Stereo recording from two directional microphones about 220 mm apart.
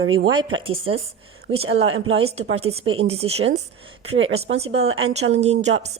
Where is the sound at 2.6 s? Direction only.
25° right (ahead or behind).